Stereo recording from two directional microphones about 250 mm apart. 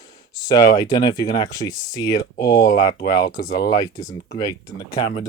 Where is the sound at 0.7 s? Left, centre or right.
Centre.